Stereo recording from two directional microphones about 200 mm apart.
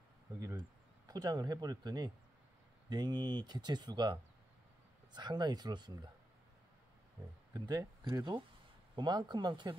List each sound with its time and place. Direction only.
0.4 s speech: 15° right (ahead or behind)
7.5 s speech: 20° right (ahead or behind)